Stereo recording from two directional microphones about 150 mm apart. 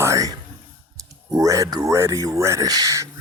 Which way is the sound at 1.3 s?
20° right (ahead or behind).